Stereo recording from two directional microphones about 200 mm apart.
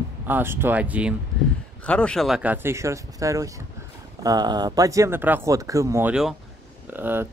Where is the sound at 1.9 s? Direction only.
5° left (ahead or behind).